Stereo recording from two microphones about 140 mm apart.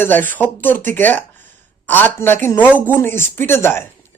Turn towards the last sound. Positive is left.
turn(degrees=15)  # may be behind; listen again after turning